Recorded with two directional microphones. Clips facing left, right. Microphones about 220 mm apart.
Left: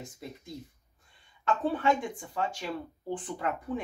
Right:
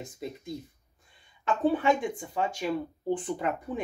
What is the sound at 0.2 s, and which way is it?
Speech, 20° right (ahead or behind).